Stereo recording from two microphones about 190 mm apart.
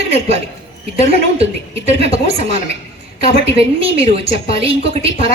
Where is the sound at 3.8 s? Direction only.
30° right (ahead or behind).